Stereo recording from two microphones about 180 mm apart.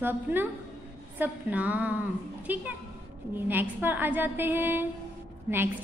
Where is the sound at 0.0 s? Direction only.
10° right (ahead or behind).